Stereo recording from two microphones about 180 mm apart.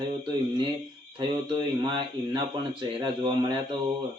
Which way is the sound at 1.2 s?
25° right (ahead or behind).